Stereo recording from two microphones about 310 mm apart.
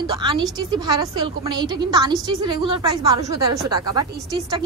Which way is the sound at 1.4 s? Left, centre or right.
Centre.